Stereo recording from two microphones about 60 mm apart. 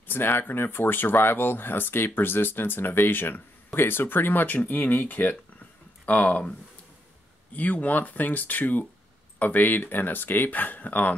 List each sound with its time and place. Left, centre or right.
0.1 s speech: left
7.5 s speech: left